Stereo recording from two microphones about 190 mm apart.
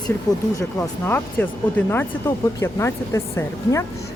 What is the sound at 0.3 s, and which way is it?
Speech, 20° left (ahead or behind).